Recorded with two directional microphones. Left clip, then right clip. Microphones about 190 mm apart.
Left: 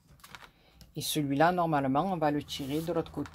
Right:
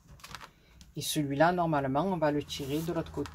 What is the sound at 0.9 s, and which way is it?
Speech, 50° left (ahead or behind).